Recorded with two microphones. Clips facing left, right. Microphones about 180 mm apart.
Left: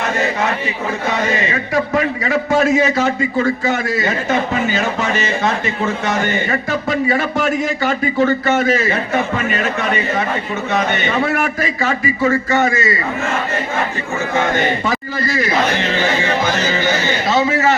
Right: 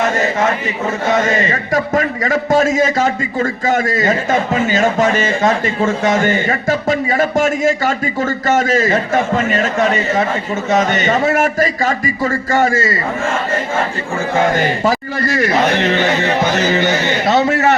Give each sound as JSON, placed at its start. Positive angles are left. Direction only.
{"t": 1.1, "sound": "a man's voice", "side_deg": -45}
{"t": 17.2, "sound": "a man's voice", "side_deg": -65}